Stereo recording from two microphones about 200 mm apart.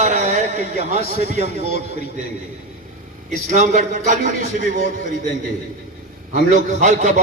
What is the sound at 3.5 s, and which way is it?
A man's voice, 40° right (ahead or behind).